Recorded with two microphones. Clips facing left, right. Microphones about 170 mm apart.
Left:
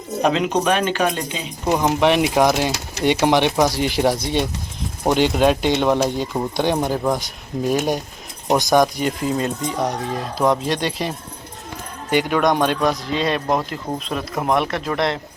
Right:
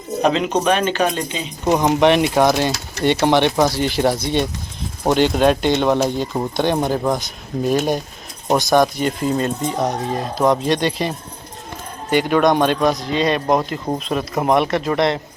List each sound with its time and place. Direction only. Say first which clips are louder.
0.2 s speech: right 1 dB; 10° left (ahead or behind)
9.0 s speech: right 2 dB; 5° left (ahead or behind)
9.7 s speech: right 2 dB; 10° right (ahead or behind)
10.7 s speech: right 4 dB; 10° left (ahead or behind)
12.1 s speech: right 2 dB; 10° left (ahead or behind)
12.8 s speech: right 2 dB; 15° right (ahead or behind)
13.1 s speech: right 3 dB; centre (ahead or behind)